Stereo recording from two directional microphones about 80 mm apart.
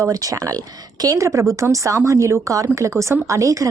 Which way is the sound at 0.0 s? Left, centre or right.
Right.